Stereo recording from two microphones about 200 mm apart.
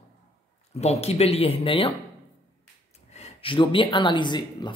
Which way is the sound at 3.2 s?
25° left (ahead or behind).